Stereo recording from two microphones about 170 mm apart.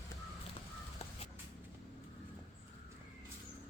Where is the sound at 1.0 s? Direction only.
40° left (ahead or behind).